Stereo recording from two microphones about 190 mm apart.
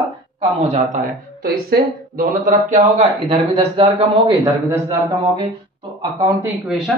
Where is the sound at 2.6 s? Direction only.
40° right (ahead or behind); by 5.4 s 15° right (ahead or behind).